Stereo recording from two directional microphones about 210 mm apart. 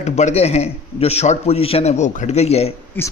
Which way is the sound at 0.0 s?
35° left (ahead or behind).